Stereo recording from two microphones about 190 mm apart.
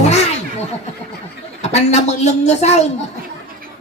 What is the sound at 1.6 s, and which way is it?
A woman's voice, 35° left (ahead or behind).